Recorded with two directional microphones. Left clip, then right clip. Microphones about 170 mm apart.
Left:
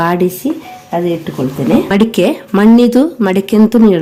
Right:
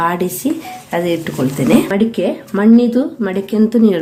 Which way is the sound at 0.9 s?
35° left (ahead or behind).